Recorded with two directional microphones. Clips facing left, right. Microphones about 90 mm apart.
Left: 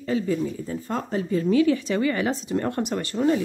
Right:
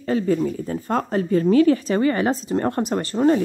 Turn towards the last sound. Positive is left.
turn(degrees=-40)  # may be behind; listen again after turning